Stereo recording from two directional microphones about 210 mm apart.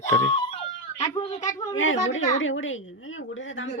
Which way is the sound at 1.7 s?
65° left (ahead or behind).